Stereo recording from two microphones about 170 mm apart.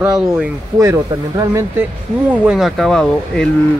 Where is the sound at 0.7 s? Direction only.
20° right (ahead or behind).